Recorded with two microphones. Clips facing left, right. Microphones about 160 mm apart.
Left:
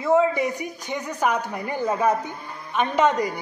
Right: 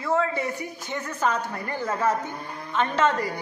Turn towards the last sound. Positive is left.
turn(degrees=15)  # may be behind; listen again after turning